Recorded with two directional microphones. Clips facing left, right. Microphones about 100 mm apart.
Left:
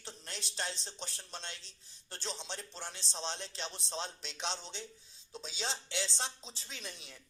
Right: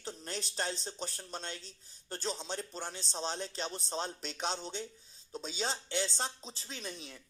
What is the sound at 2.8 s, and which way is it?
Speech, 40° right (ahead or behind).